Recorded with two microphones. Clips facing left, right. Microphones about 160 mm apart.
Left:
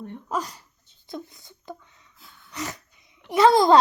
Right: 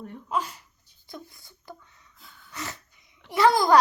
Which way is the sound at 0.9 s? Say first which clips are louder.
Left 6 dB; 20° left (ahead or behind).